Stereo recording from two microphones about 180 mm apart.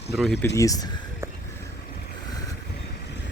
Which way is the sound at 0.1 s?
Centre (ahead or behind).